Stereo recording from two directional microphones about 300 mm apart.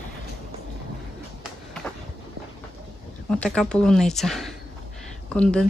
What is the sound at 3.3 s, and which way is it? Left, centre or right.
Speech, centre.